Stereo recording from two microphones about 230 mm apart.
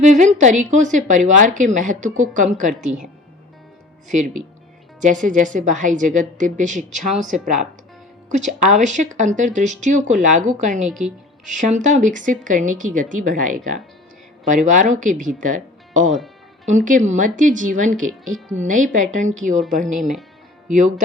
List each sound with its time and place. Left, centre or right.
0.0 s a woman's voice: right
4.9 s a woman's voice: right
16.0 s speech: centre
16.6 s a woman's voice: right